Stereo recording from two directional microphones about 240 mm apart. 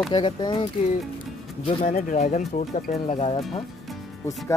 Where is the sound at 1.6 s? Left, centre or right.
Left.